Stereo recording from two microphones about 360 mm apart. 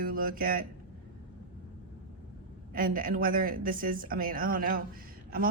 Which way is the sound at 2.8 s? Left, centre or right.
Right.